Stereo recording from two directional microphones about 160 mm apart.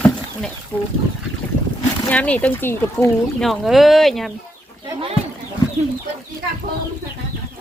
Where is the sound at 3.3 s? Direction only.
Centre (ahead or behind).